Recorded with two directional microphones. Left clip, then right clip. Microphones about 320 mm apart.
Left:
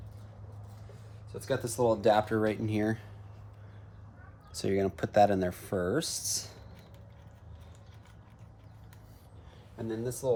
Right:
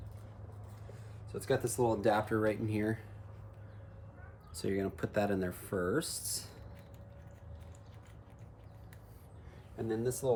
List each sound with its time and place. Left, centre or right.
1.3 s speech: centre
4.5 s speech: centre
9.7 s speech: centre